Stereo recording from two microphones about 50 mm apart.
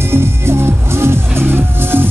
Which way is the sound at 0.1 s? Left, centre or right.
Right.